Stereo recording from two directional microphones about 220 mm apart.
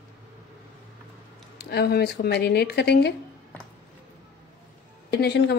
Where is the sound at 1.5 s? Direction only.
50° left (ahead or behind).